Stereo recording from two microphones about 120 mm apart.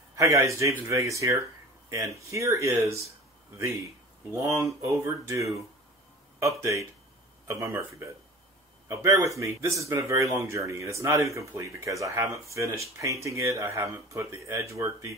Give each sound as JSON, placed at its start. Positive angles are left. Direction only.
{"t": 0.1, "sound": "speech", "side_deg": -25}
{"t": 4.3, "sound": "speech", "side_deg": -25}
{"t": 6.6, "sound": "speech", "side_deg": -25}